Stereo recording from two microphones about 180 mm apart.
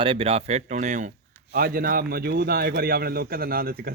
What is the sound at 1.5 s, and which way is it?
A man's voice, 55° right (ahead or behind).